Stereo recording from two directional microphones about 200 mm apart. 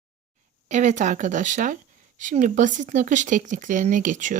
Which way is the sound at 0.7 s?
35° right (ahead or behind).